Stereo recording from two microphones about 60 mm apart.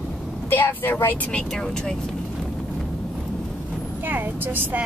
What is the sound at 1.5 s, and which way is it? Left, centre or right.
Speech, centre.